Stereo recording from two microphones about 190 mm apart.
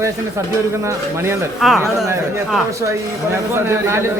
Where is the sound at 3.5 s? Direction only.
15° right (ahead or behind).